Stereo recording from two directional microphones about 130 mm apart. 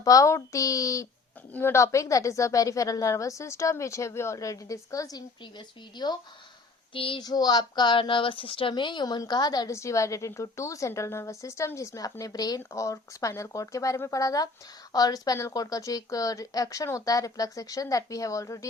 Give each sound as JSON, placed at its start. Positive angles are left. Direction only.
{"t": 0.0, "sound": "speech", "side_deg": 25}
{"t": 6.9, "sound": "a sound", "side_deg": 45}
{"t": 7.2, "sound": "speech", "side_deg": 30}